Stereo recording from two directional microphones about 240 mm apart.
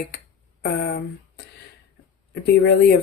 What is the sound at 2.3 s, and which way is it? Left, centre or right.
Speech, left.